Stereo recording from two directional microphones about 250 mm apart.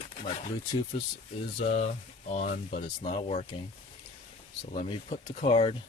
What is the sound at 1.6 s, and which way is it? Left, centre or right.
Speech, left.